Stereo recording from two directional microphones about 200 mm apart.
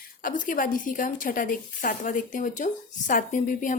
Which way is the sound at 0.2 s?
40° left (ahead or behind).